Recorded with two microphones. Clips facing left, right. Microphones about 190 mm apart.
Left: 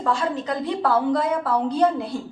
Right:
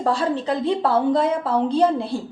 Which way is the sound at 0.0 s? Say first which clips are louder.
Right 3 dB; 35° right (ahead or behind).